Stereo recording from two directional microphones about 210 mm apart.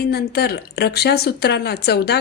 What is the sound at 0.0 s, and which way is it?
Speech, 50° left (ahead or behind).